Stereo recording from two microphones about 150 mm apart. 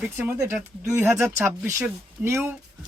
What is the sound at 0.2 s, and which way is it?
Speech, 10° right (ahead or behind).